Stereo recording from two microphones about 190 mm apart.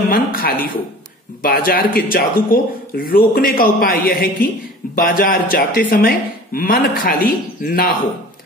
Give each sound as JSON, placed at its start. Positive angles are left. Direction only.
{"t": 0.1, "sound": "a man's voice", "side_deg": 50}